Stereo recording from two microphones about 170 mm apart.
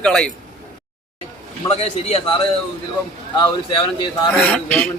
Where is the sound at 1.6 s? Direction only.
20° left (ahead or behind).